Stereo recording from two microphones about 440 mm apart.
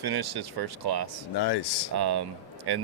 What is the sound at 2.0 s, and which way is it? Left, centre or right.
Speech, right.